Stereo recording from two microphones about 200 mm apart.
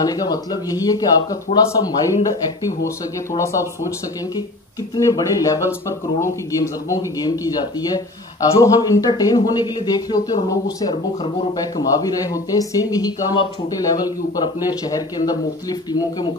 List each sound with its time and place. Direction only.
0.0 s speech: 20° left (ahead or behind)
4.9 s speech: 20° left (ahead or behind)
14.7 s speech: 20° left (ahead or behind)